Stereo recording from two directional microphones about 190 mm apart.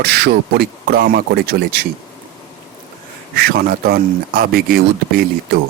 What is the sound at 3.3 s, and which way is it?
Speech, 50° right (ahead or behind).